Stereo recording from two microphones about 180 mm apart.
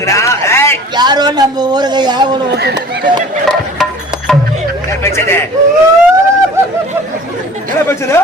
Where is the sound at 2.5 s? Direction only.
65° right (ahead or behind).